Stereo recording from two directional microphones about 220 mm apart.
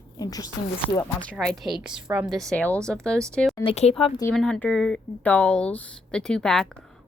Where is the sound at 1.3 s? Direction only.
Centre (ahead or behind).